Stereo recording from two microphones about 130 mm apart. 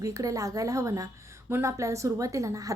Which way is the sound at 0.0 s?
25° right (ahead or behind).